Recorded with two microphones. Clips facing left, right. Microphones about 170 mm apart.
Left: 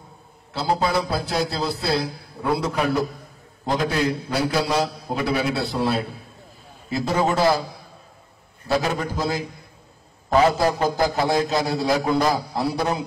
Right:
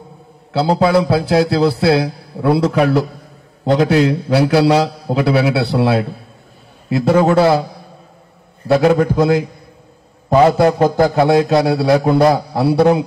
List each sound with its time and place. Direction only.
0.5 s a man's voice: 70° right (ahead or behind)
8.6 s a man's voice: 55° right (ahead or behind)
10.6 s a man's voice: 60° right (ahead or behind)